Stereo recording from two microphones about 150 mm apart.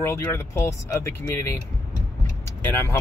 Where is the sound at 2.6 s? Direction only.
15° left (ahead or behind).